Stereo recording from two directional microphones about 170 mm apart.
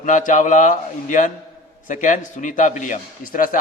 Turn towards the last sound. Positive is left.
turn(degrees=55)  # may be behind; listen again after turning